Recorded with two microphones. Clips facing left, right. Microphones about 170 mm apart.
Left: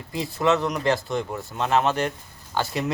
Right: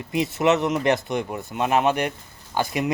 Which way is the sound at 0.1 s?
20° right (ahead or behind).